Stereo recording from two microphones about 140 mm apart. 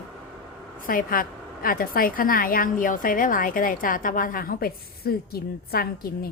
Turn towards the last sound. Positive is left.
turn(degrees=90)